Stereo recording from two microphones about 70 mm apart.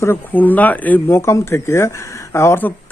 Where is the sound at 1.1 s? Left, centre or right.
Left.